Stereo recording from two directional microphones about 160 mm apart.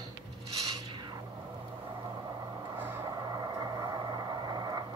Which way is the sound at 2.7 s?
15° right (ahead or behind).